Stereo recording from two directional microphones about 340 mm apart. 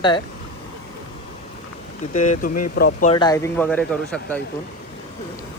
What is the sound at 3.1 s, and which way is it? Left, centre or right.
Speech, centre.